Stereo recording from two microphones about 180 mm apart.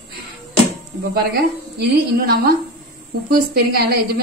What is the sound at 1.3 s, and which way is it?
A woman's voice, 65° right (ahead or behind).